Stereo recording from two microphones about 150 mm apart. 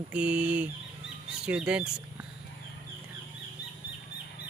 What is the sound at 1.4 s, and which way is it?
Speech, 5° right (ahead or behind).